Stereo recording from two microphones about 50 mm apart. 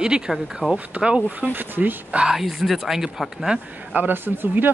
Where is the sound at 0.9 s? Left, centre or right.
Centre.